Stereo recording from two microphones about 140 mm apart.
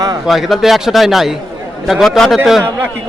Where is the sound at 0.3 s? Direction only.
Centre (ahead or behind).